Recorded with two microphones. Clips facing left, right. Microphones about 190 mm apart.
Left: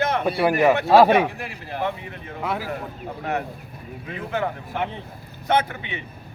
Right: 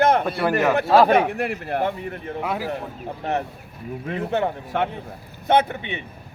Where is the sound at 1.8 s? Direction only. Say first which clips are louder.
Right 2 dB; 45° right (ahead or behind).